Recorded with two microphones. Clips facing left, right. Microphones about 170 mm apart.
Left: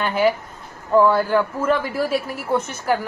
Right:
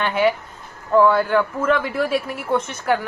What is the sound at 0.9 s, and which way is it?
A woman's voice, 5° left (ahead or behind).